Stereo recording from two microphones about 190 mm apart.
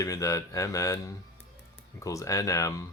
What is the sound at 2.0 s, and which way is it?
Speech, 15° left (ahead or behind).